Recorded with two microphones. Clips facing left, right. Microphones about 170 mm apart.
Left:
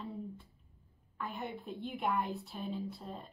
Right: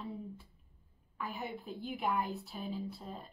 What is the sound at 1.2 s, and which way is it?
A woman's voice, 5° right (ahead or behind).